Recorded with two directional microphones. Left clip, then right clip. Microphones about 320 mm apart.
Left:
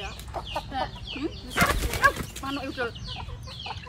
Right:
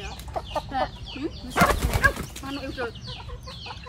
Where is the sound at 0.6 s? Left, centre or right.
Right.